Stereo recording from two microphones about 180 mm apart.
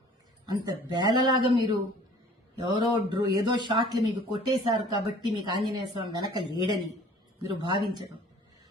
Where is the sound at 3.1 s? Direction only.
25° right (ahead or behind).